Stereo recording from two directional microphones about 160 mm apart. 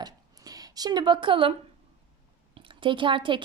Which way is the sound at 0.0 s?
25° right (ahead or behind).